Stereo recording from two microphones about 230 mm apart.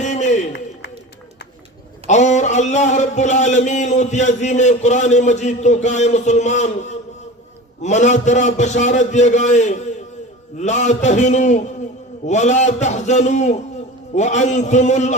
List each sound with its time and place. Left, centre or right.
0.0 s a sound: left
2.0 s speech: left
7.8 s speech: left